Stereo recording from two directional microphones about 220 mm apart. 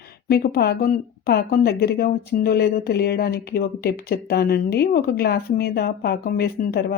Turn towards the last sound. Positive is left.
turn(degrees=45)  # may be behind; listen again after turning